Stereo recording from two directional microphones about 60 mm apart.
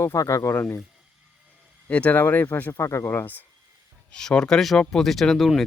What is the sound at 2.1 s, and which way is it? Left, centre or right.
Speech, left.